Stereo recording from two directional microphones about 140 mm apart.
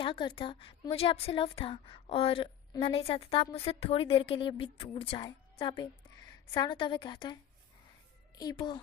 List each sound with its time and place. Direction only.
0.0 s a woman's voice: 35° left (ahead or behind)
3.2 s a woman's voice: 35° left (ahead or behind)
8.4 s a woman's voice: 30° left (ahead or behind)